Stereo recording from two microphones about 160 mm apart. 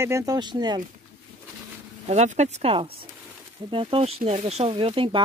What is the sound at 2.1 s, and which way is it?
Speech, 45° right (ahead or behind).